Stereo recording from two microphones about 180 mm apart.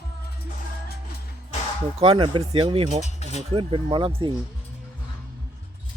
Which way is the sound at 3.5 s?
25° right (ahead or behind).